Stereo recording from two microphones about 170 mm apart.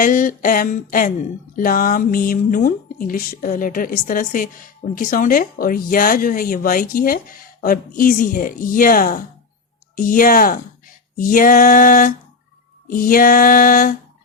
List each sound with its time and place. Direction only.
0.0 s speech: 50° left (ahead or behind)